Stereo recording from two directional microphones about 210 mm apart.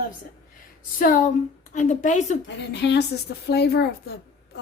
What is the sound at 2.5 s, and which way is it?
A woman's voice, 55° left (ahead or behind).